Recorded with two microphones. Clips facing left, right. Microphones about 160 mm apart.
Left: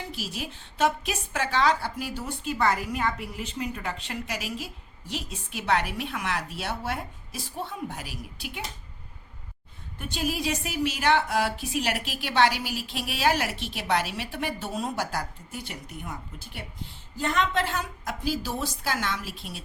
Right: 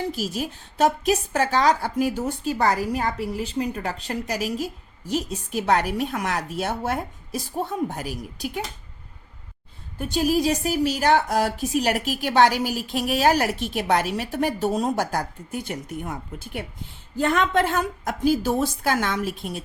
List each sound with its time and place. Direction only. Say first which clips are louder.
0.0 s a woman's voice: right 8 dB; 40° right (ahead or behind)
10.0 s a woman's voice: right 8 dB; 40° right (ahead or behind)